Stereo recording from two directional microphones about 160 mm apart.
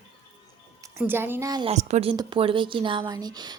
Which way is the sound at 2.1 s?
30° right (ahead or behind).